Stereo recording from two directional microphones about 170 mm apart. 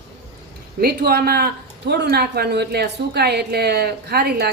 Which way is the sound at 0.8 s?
65° right (ahead or behind).